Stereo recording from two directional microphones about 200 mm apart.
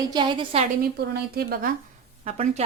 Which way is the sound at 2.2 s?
30° right (ahead or behind).